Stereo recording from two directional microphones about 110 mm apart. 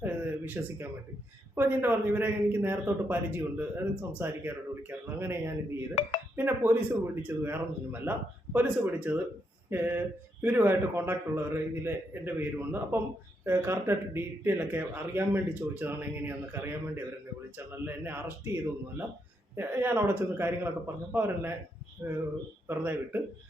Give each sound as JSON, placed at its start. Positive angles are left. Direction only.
{"t": 0.0, "sound": "a sound", "side_deg": -15}
{"t": 1.5, "sound": "speech", "side_deg": -20}
{"t": 5.9, "sound": "speech", "side_deg": 90}
{"t": 6.3, "sound": "speech", "side_deg": -20}